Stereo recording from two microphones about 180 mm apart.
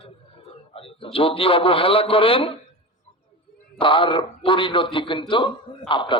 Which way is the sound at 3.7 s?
30° left (ahead or behind).